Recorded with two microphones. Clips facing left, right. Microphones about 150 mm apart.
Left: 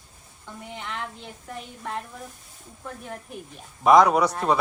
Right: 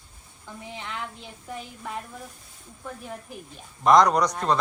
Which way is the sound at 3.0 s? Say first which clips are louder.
Left 1 dB; centre (ahead or behind).